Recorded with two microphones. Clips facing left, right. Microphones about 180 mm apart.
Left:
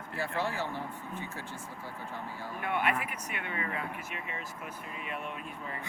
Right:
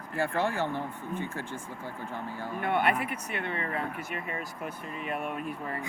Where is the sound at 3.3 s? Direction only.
35° right (ahead or behind).